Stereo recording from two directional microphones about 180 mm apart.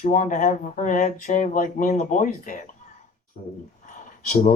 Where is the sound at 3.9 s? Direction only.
45° left (ahead or behind).